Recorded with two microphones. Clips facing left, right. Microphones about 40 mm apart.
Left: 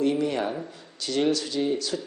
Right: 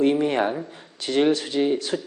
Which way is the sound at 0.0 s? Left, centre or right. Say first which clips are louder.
Right 4 dB; right.